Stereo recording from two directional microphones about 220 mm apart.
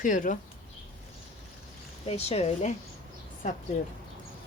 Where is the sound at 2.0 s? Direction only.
30° left (ahead or behind).